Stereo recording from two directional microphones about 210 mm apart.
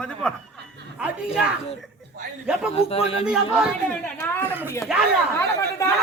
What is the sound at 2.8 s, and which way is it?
Speech, 30° left (ahead or behind).